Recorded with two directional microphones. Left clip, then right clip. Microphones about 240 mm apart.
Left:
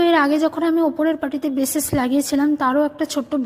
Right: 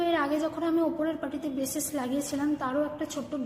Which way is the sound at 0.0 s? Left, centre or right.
Left.